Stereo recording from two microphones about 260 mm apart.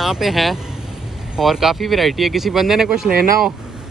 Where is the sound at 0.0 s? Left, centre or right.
Centre.